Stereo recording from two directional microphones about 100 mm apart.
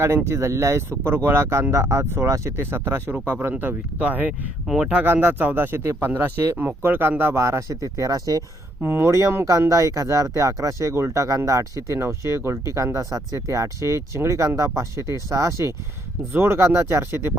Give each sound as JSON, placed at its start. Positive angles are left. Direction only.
{"t": 0.3, "sound": "speech", "side_deg": -30}
{"t": 5.0, "sound": "speech", "side_deg": -20}
{"t": 8.8, "sound": "speech", "side_deg": -25}